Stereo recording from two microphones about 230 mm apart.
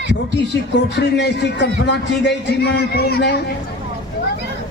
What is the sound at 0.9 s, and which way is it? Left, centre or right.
A man's voice, left.